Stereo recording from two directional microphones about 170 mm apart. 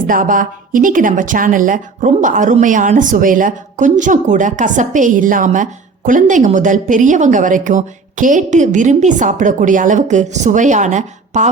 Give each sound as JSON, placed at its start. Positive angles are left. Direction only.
{"t": 0.0, "sound": "a woman's voice", "side_deg": -55}